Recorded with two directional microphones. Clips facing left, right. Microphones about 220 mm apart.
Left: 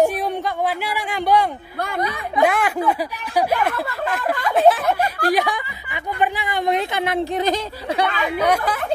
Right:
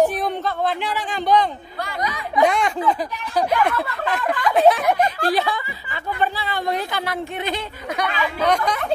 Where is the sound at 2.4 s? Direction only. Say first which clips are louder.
Even; 5° left (ahead or behind).